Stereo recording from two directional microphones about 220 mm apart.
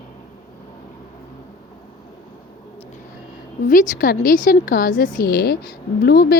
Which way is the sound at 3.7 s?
40° left (ahead or behind).